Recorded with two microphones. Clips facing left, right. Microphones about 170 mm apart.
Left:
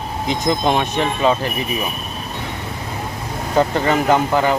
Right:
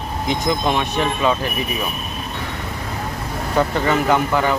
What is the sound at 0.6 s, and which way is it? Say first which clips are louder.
Speech: left 2 dB; 30° left (ahead or behind).